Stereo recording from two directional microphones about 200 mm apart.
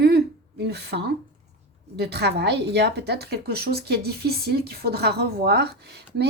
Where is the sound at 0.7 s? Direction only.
55° right (ahead or behind).